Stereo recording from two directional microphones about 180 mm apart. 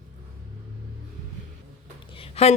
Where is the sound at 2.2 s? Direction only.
35° left (ahead or behind).